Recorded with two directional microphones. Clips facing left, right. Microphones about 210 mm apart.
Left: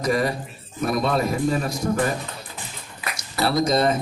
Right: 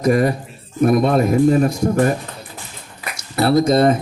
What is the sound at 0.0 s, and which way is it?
A man's voice, 50° right (ahead or behind).